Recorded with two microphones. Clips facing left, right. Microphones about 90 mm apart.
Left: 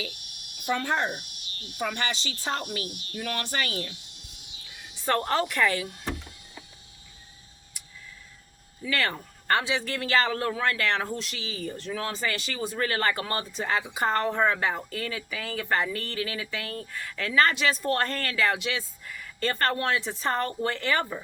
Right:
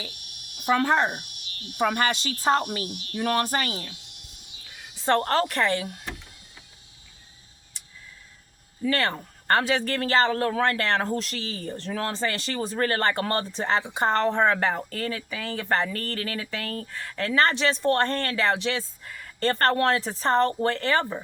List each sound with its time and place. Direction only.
0.6 s speech: 60° right (ahead or behind)
0.9 s speech: 40° right (ahead or behind)
1.8 s speech: 55° right (ahead or behind)
3.1 s speech: 55° right (ahead or behind)
3.3 s speech: 40° right (ahead or behind)
5.2 s speech: 40° right (ahead or behind)
8.8 s speech: 35° right (ahead or behind)
9.6 s speech: 50° right (ahead or behind); by 14.5 s 30° right (ahead or behind)
14.5 s speech: 40° right (ahead or behind)